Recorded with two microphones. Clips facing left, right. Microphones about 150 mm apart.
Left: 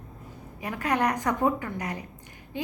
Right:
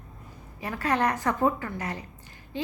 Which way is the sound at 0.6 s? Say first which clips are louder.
Even; 15° left (ahead or behind).